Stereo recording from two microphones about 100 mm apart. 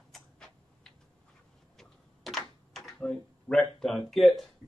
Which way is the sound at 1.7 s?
Centre (ahead or behind).